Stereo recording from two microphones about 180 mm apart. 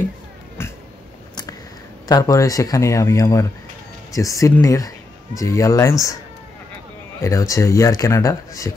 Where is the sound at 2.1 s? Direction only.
20° left (ahead or behind).